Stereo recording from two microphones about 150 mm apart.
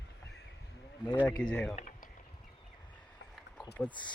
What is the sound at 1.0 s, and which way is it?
Speech, 30° left (ahead or behind).